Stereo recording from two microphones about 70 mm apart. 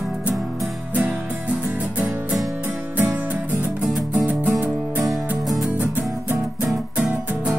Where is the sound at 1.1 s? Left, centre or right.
Right.